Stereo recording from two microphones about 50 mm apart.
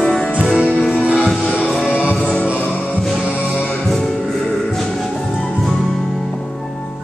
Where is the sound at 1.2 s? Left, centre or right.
Centre.